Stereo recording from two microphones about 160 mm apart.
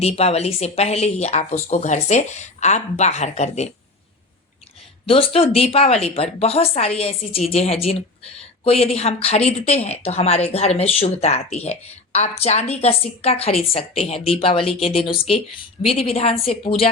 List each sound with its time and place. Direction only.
0.0 s speech: 40° left (ahead or behind)
5.0 s speech: 35° left (ahead or behind)